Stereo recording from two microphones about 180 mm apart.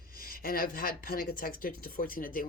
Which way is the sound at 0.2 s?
55° left (ahead or behind).